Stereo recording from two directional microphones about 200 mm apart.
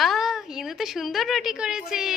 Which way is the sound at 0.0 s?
Centre (ahead or behind).